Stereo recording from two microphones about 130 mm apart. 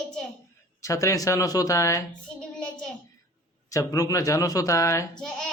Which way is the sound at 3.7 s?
25° left (ahead or behind).